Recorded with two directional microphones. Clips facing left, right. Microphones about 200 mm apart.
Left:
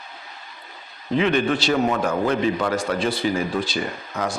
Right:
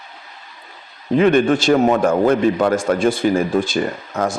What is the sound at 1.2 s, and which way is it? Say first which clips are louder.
A man's voice: right 6 dB; 50° right (ahead or behind).